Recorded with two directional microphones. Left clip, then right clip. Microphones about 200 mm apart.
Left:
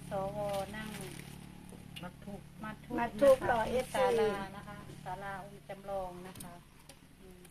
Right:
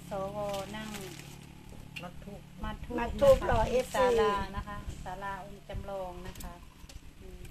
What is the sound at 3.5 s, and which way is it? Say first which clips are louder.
Speech: right 4 dB; 15° right (ahead or behind).